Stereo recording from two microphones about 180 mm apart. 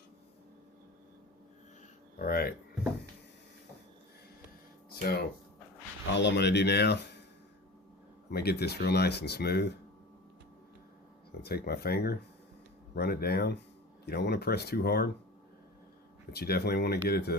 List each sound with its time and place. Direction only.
2.1 s speech: 55° left (ahead or behind)
6.1 s speech: 75° left (ahead or behind)
8.3 s speech: 60° left (ahead or behind)
11.4 s speech: 60° left (ahead or behind)
16.3 s speech: 60° left (ahead or behind)